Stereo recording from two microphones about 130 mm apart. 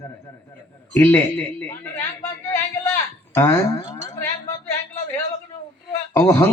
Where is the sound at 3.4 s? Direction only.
20° left (ahead or behind).